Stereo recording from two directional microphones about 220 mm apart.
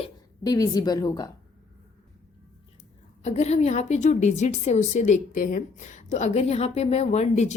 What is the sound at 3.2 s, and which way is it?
A woman's voice, 30° left (ahead or behind).